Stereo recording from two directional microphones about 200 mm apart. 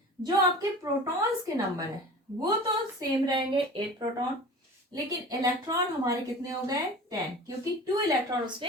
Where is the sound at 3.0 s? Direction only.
20° right (ahead or behind).